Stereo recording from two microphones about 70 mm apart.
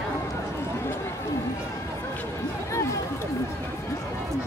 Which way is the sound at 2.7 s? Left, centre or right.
Left.